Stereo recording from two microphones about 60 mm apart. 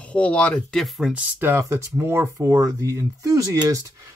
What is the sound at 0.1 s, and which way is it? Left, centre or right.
Speech, left.